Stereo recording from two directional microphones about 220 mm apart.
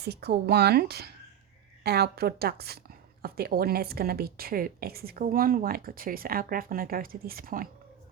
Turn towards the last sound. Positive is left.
turn(degrees=-40)  # may be behind; listen again after turning